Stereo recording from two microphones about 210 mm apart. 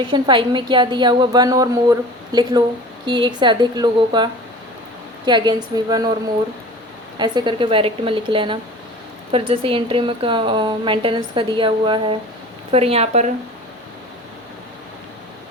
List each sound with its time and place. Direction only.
0.0 s a woman's voice: 20° right (ahead or behind)
7.2 s a woman's voice: 20° right (ahead or behind)